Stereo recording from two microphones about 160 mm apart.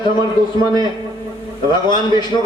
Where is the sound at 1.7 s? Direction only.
25° left (ahead or behind).